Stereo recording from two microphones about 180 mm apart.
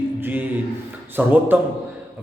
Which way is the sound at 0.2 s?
10° right (ahead or behind).